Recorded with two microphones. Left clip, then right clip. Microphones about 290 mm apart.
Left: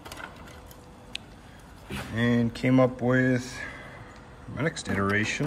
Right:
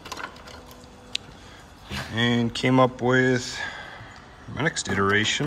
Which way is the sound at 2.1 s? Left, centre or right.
Centre.